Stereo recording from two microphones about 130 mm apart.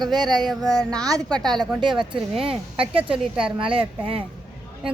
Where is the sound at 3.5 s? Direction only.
45° right (ahead or behind).